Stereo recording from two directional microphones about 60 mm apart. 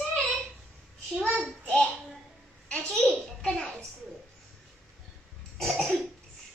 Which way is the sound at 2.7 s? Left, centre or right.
Centre.